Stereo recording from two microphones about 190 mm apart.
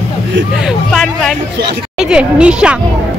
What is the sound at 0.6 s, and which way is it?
A woman's voice, centre (ahead or behind).